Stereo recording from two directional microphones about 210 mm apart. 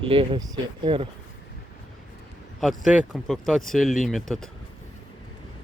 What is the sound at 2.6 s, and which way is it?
Speech, centre (ahead or behind).